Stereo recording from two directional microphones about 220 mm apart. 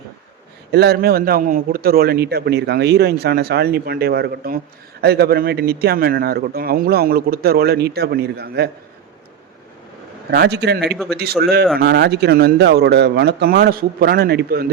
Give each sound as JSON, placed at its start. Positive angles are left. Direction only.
{"t": 0.7, "sound": "a man's voice", "side_deg": -50}
{"t": 10.3, "sound": "a man's voice", "side_deg": -50}
{"t": 10.9, "sound": "a man's voice", "side_deg": 0}
{"t": 11.2, "sound": "a man's voice", "side_deg": -45}